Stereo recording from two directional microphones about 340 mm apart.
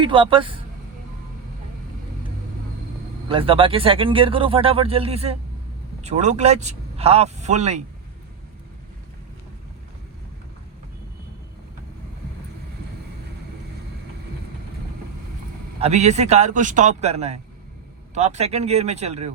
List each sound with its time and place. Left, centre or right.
0.0 s speech: centre
3.2 s a man's voice: centre
15.8 s a man's voice: centre